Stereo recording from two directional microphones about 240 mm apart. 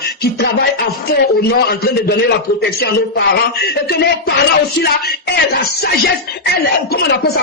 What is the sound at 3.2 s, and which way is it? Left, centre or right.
A man's voice, left.